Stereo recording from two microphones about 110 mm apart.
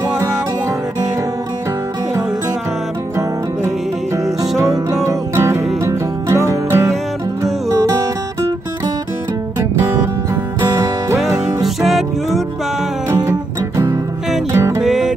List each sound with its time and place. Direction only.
4.2 s music: 30° right (ahead or behind)
10.6 s music: 35° right (ahead or behind)
11.6 s music: centre (ahead or behind)
14.5 s music: 25° right (ahead or behind)
14.8 s music: 5° right (ahead or behind)